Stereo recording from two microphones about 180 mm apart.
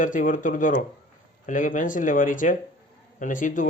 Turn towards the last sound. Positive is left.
turn(degrees=45)  # may be behind; listen again after turning